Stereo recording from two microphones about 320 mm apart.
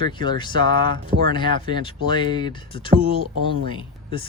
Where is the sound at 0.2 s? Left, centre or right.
Centre.